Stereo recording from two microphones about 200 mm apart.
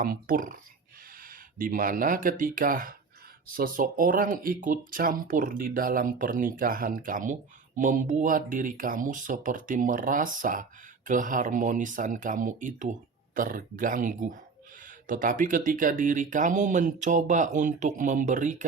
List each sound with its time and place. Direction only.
0.0 s speech: 45° right (ahead or behind)